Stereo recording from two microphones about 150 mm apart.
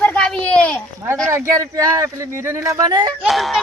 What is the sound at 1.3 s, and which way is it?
Speech, 20° right (ahead or behind).